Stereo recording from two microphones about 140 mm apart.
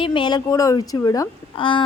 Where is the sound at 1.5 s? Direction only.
35° left (ahead or behind).